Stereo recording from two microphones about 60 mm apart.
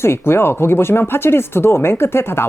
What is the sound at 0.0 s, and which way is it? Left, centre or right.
A woman's voice, left.